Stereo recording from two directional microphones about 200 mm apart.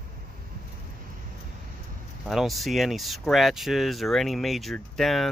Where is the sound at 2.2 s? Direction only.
Centre (ahead or behind).